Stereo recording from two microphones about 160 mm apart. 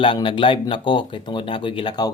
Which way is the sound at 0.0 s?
35° left (ahead or behind).